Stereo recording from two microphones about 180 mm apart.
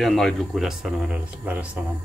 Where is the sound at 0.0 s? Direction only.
Centre (ahead or behind).